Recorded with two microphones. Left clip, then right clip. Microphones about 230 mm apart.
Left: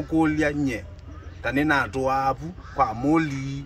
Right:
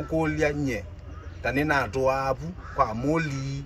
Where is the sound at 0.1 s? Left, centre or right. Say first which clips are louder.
Left 3 dB; centre.